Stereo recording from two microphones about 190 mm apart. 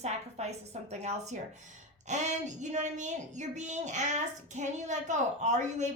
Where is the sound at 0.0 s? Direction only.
35° right (ahead or behind).